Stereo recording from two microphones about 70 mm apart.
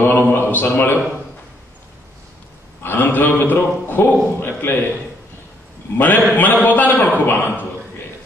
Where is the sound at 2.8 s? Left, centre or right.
Left.